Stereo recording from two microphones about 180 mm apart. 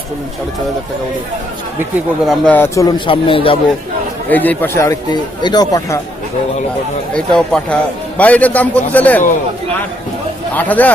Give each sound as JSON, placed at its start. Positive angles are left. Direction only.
{"t": 2.2, "sound": "speech", "side_deg": 5}
{"t": 3.1, "sound": "speech", "side_deg": 30}
{"t": 4.3, "sound": "speech", "side_deg": 10}
{"t": 7.1, "sound": "speech", "side_deg": 5}
{"t": 10.5, "sound": "speech", "side_deg": 10}